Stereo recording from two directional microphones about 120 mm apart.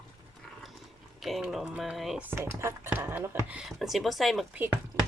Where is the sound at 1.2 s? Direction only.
Centre (ahead or behind).